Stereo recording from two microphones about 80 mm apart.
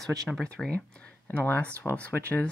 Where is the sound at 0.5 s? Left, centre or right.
Centre.